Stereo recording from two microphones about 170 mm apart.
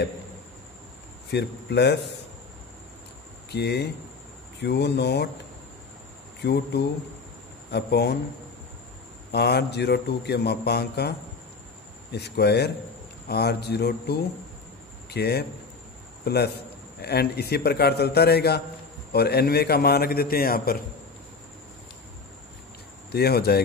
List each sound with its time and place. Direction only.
1.3 s speech: 80° left
3.5 s speech: 80° left
6.4 s a man's voice: 75° left (ahead or behind)
9.3 s a man's voice: 75° left (ahead or behind)
23.1 s a man's voice: 70° left (ahead or behind)